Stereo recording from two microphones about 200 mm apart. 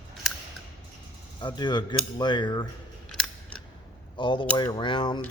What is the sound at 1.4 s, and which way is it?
Speech, 25° left (ahead or behind).